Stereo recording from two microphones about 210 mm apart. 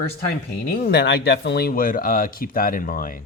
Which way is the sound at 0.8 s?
55° left (ahead or behind).